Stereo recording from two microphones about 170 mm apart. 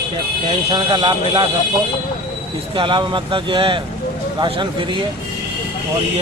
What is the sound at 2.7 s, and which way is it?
Speech, 30° right (ahead or behind).